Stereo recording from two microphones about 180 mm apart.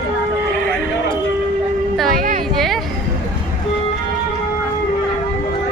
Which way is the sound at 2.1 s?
50° right (ahead or behind).